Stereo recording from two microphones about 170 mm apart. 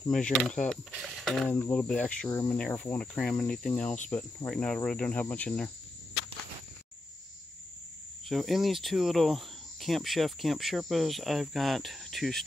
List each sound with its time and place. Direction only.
0.1 s cricket: 5° left (ahead or behind)
0.7 s speech: centre (ahead or behind)
1.5 s cricket: 10° left (ahead or behind)
2.2 s speech: 20° left (ahead or behind)
2.5 s cricket: 10° left (ahead or behind)
8.3 s cricket: centre (ahead or behind)